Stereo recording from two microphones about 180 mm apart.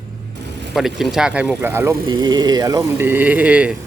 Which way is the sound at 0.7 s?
Centre (ahead or behind).